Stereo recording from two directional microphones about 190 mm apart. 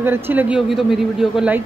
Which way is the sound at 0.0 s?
10° right (ahead or behind).